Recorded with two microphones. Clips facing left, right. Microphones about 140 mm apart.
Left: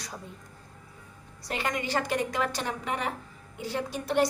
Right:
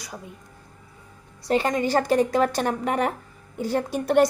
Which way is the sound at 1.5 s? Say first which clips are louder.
Right 9 dB; 35° right (ahead or behind).